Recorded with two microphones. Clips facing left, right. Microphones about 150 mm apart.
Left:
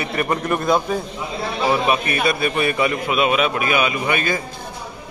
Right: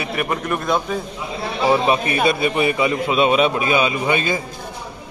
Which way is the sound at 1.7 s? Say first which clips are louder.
Right 3 dB; 25° right (ahead or behind).